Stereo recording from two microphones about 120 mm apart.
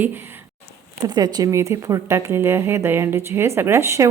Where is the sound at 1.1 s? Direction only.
35° right (ahead or behind).